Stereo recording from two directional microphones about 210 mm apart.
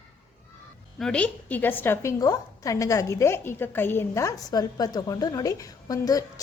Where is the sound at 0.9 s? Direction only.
5° left (ahead or behind).